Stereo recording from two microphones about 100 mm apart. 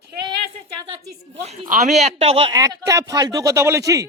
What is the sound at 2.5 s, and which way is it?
Speech, 35° right (ahead or behind).